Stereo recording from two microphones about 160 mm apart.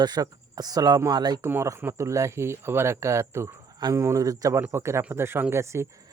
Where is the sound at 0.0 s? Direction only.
25° right (ahead or behind).